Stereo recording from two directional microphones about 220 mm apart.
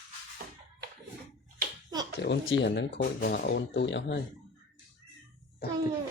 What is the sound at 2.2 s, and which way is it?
Speech, 55° left (ahead or behind).